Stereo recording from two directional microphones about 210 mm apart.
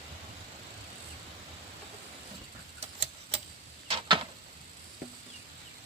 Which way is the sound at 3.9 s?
25° right (ahead or behind).